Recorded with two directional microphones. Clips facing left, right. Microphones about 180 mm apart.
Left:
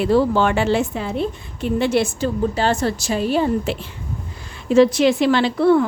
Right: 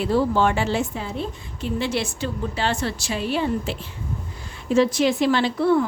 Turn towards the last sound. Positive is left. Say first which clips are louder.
# left 4 dB
turn(degrees=75)  # may be behind; listen again after turning